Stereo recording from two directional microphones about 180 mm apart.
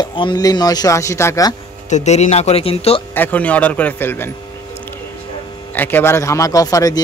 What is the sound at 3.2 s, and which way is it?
A man's voice, 10° left (ahead or behind).